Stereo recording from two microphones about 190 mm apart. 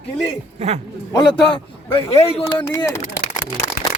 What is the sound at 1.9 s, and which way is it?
Speech, 30° left (ahead or behind).